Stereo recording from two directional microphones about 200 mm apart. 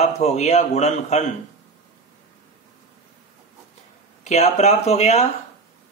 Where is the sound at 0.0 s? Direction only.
35° left (ahead or behind).